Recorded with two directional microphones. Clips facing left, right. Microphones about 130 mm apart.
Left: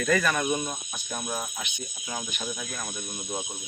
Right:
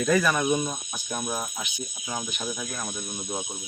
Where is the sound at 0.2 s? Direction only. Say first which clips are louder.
Right 2 dB; 5° right (ahead or behind).